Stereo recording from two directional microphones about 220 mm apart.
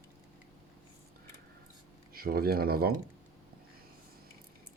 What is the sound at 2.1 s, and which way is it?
Speech, 45° right (ahead or behind).